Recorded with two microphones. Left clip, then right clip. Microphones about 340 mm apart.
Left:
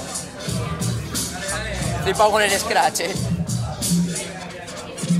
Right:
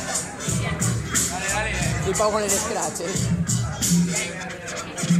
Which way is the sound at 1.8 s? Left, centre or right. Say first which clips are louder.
Left 9 dB; left.